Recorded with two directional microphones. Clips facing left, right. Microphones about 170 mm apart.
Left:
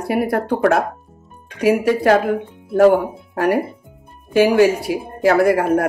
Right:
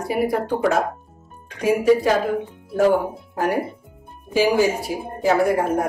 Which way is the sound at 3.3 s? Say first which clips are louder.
Left 5 dB; 70° left (ahead or behind).